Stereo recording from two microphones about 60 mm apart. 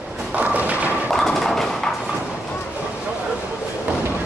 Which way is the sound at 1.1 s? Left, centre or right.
Centre.